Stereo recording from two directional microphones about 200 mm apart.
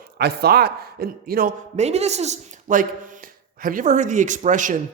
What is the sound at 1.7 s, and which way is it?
Speech, 35° right (ahead or behind).